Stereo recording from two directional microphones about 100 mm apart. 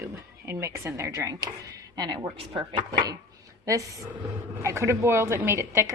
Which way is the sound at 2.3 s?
60° right (ahead or behind).